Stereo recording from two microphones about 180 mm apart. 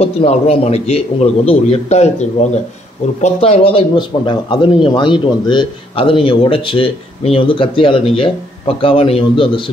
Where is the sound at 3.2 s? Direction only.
35° left (ahead or behind).